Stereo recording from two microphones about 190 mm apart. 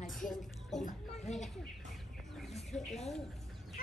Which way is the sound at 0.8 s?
40° left (ahead or behind).